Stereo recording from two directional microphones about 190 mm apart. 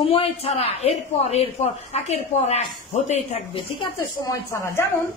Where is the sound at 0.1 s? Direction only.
30° left (ahead or behind).